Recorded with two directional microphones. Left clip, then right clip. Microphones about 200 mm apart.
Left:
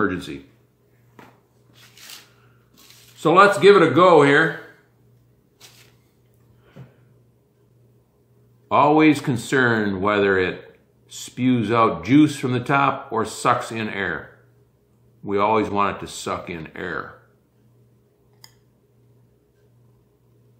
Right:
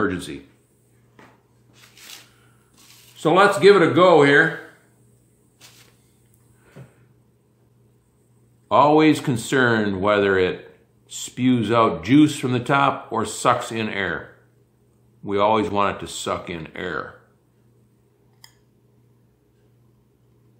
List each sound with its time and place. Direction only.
0.0 s speech: 10° right (ahead or behind)
3.2 s speech: 10° right (ahead or behind)
8.6 s speech: 15° right (ahead or behind)
15.2 s speech: 15° right (ahead or behind)